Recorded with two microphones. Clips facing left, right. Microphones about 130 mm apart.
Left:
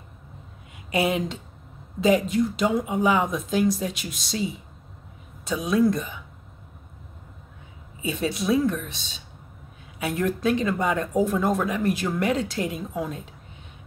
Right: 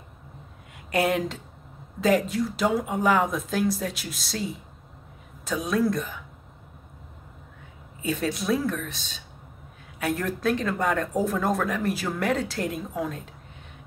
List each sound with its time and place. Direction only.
0.9 s a woman's voice: 5° left (ahead or behind)
8.0 s a woman's voice: 5° left (ahead or behind)
9.9 s a woman's voice: 5° left (ahead or behind)